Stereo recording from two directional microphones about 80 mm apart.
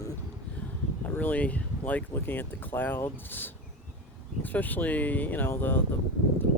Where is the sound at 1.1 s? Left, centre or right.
Centre.